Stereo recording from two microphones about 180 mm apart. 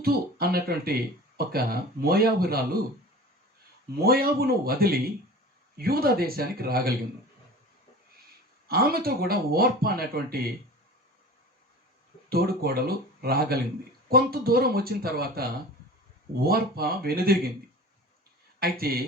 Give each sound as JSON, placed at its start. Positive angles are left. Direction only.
{"t": 0.0, "sound": "speech", "side_deg": -60}
{"t": 4.0, "sound": "speech", "side_deg": -55}
{"t": 8.6, "sound": "speech", "side_deg": -60}
{"t": 12.3, "sound": "speech", "side_deg": -60}
{"t": 18.6, "sound": "speech", "side_deg": -55}